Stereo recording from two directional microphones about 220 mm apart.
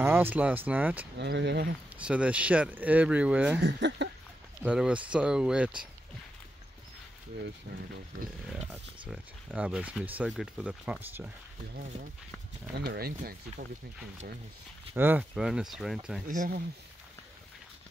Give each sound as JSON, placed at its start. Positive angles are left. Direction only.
{"t": 0.0, "sound": "speech", "side_deg": -10}
{"t": 1.1, "sound": "speech", "side_deg": -50}
{"t": 2.0, "sound": "speech", "side_deg": -5}
{"t": 3.6, "sound": "speech", "side_deg": -55}
{"t": 4.6, "sound": "speech", "side_deg": -5}
{"t": 9.1, "sound": "speech", "side_deg": -5}
{"t": 12.7, "sound": "speech", "side_deg": -50}
{"t": 15.0, "sound": "speech", "side_deg": -10}
{"t": 16.3, "sound": "speech", "side_deg": -40}